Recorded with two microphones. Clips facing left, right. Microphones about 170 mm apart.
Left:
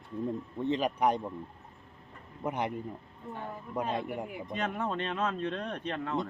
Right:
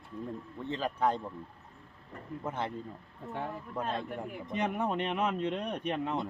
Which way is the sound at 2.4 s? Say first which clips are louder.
Left 4 dB; 15° left (ahead or behind).